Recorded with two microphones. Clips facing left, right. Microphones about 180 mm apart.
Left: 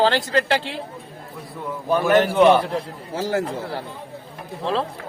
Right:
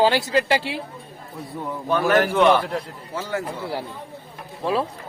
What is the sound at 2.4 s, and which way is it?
Speech, 30° left (ahead or behind).